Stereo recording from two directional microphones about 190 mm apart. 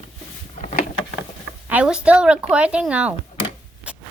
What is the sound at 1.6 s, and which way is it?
Speech, 5° right (ahead or behind).